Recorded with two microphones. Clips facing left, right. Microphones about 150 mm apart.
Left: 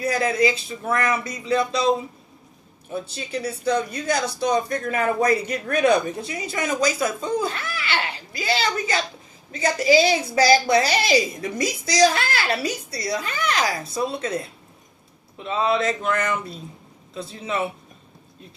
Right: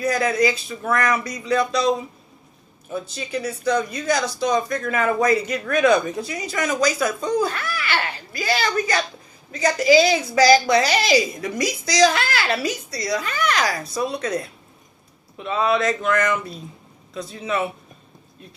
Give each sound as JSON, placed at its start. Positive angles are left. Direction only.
{"t": 0.0, "sound": "speech", "side_deg": 30}
{"t": 12.1, "sound": "a child's voice", "side_deg": -30}
{"t": 12.9, "sound": "speech", "side_deg": 30}